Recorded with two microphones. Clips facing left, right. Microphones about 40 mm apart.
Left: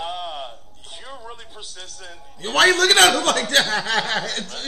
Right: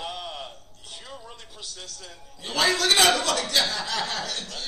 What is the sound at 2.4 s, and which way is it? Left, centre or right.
A man's voice, left.